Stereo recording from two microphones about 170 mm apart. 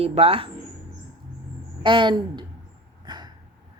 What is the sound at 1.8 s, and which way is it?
Speech, 30° right (ahead or behind).